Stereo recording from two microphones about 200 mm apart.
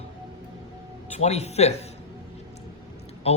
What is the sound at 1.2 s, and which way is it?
Speech, 30° left (ahead or behind).